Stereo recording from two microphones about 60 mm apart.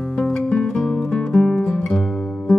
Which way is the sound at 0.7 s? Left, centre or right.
Centre.